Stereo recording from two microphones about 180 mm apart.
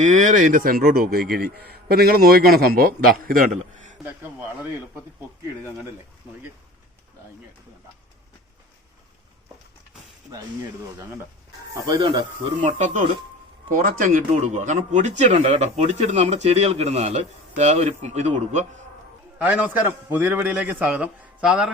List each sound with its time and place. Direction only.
0.0 s a man's voice: 45° right (ahead or behind)
11.7 s speech: 25° right (ahead or behind)
12.5 s speech: 45° right (ahead or behind)
19.4 s a man's voice: 10° right (ahead or behind)